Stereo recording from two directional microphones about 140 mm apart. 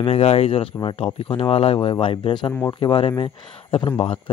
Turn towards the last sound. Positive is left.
turn(degrees=35)  # may be behind; listen again after turning